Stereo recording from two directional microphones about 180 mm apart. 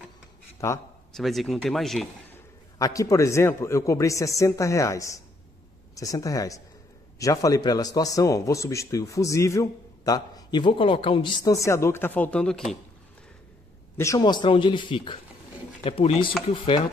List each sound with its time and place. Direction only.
0.6 s a man's voice: 15° left (ahead or behind)
1.1 s speech: centre (ahead or behind)
2.8 s a man's voice: 20° left (ahead or behind)
13.9 s speech: 20° left (ahead or behind)